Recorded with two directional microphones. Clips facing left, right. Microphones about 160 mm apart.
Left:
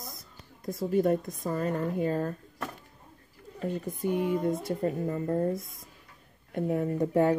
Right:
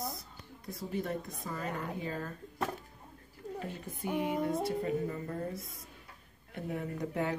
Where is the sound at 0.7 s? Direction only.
45° left (ahead or behind).